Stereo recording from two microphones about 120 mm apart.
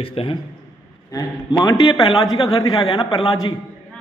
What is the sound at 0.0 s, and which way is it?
Speech, 50° left (ahead or behind).